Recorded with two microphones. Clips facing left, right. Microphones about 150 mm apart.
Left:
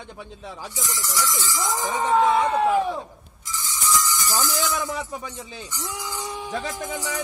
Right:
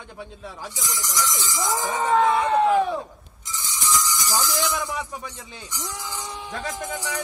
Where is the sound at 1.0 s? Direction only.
15° right (ahead or behind).